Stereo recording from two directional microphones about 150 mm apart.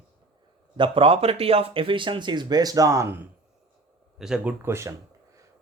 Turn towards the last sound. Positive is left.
turn(degrees=-20)  # may be behind; listen again after turning